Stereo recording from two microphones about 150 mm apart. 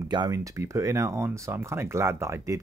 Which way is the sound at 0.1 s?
25° right (ahead or behind).